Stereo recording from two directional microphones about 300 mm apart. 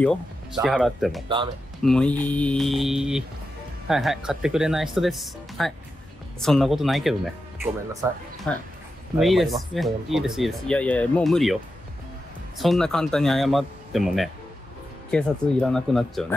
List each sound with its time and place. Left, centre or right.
0.0 s speech: centre
9.2 s speech: centre